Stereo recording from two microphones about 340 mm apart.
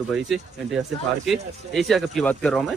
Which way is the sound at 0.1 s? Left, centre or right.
Centre.